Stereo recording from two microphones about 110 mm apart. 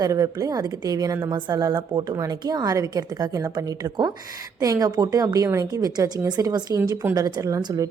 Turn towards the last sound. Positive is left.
turn(degrees=-30)  # may be behind; listen again after turning